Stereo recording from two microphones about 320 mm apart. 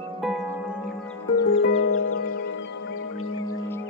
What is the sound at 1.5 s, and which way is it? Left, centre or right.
Music, left.